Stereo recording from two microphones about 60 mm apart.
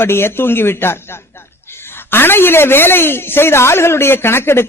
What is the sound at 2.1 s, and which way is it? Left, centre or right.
A man's voice, left.